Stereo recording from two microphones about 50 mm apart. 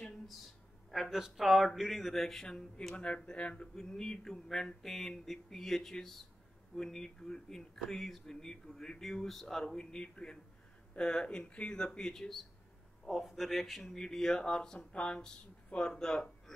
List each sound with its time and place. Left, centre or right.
0.9 s a man's voice: centre; by 3.6 s left
3.7 s a man's voice: centre